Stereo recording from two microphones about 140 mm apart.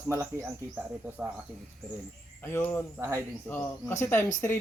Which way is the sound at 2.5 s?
15° left (ahead or behind).